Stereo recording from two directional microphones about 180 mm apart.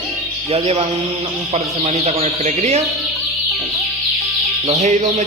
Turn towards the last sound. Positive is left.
turn(degrees=-40)  # may be behind; listen again after turning